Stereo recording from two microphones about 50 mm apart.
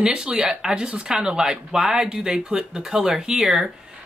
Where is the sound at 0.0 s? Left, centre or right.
Centre.